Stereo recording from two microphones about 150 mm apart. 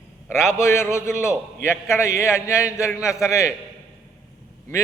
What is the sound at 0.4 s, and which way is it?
A man's voice, 20° left (ahead or behind).